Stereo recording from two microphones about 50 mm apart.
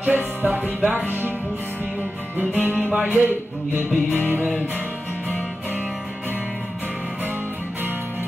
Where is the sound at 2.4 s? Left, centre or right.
Right.